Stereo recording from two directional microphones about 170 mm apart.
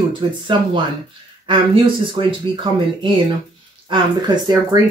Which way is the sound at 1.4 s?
30° right (ahead or behind).